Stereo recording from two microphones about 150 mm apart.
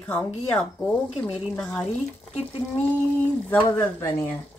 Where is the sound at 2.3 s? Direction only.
40° left (ahead or behind).